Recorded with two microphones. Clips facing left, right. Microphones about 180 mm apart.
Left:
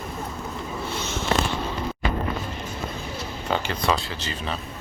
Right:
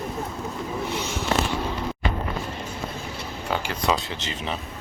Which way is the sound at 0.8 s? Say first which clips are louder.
Even; 15° right (ahead or behind).